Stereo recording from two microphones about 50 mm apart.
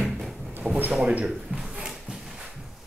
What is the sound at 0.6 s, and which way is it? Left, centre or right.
Speech, centre.